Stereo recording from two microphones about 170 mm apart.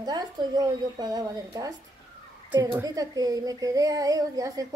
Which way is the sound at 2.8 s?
20° right (ahead or behind).